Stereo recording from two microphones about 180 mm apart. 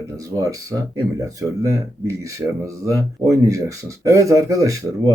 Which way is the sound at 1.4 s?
15° right (ahead or behind).